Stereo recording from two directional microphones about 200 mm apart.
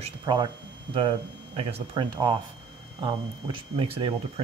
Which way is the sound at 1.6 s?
25° right (ahead or behind).